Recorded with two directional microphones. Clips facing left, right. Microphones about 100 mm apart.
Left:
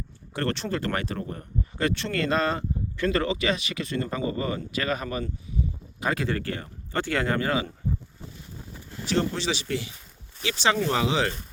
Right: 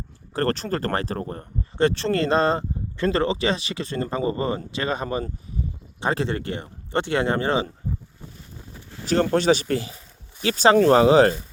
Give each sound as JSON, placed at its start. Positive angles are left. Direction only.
{"t": 0.3, "sound": "speech", "side_deg": -40}
{"t": 9.3, "sound": "speech", "side_deg": -50}